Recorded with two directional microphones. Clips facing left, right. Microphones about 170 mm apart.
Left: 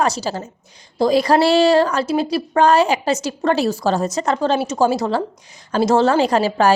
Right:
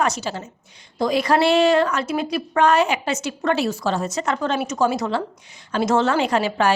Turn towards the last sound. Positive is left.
turn(degrees=35)  # may be behind; listen again after turning